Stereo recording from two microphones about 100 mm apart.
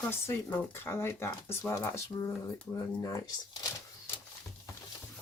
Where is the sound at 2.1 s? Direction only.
40° left (ahead or behind).